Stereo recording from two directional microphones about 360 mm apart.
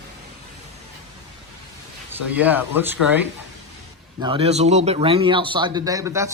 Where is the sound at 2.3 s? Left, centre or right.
Centre.